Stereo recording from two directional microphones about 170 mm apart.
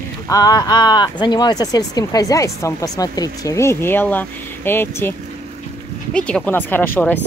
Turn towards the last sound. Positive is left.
turn(degrees=10)  # may be behind; listen again after turning